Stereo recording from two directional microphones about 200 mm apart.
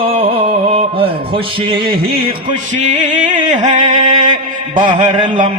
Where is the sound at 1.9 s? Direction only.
50° right (ahead or behind).